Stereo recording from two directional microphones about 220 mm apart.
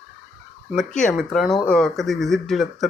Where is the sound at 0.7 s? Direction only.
Centre (ahead or behind).